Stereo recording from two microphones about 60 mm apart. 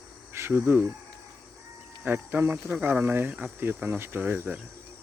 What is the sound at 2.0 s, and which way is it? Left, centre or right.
Cricket, right.